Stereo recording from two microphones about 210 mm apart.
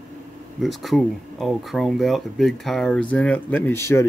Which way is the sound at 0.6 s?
Centre (ahead or behind).